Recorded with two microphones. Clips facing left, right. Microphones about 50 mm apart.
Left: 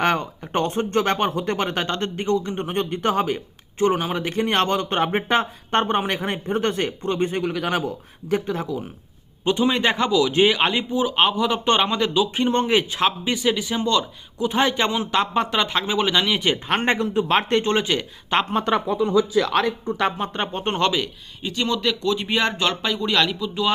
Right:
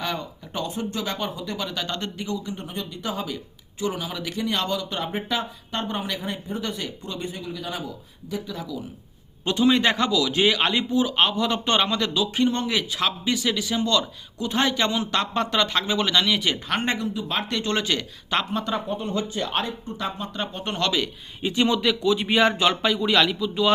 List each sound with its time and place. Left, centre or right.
0.0 s speech: left
1.9 s speech: left
9.4 s a man's voice: left
11.6 s a man's voice: left
17.2 s speech: left
17.6 s a man's voice: left
19.5 s speech: left
20.3 s speech: left
20.6 s a man's voice: left
21.4 s speech: centre